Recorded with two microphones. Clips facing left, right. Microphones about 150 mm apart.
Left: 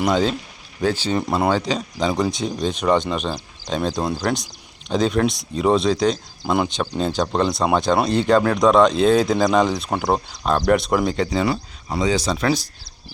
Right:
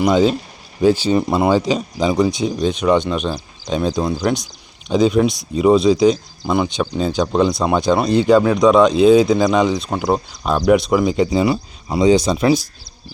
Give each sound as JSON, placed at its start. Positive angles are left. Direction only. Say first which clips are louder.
{"t": 0.0, "sound": "speech", "louder": "right 5 dB", "side_deg": -5}